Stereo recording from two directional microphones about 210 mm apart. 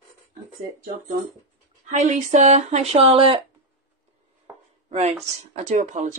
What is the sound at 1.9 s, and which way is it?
Speech, 35° right (ahead or behind).